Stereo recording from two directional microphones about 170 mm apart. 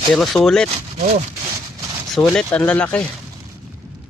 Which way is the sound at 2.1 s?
5° left (ahead or behind).